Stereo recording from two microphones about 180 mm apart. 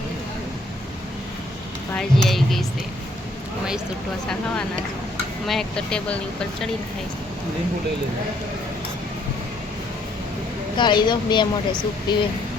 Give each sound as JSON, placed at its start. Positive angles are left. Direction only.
{"t": 2.0, "sound": "speech", "side_deg": 0}
{"t": 5.5, "sound": "speech", "side_deg": 5}
{"t": 10.8, "sound": "speech", "side_deg": 25}